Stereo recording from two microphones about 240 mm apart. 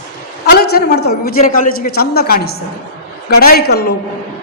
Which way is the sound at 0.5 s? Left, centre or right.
Left.